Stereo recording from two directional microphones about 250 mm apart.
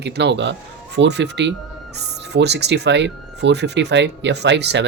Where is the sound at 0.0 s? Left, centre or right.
Right.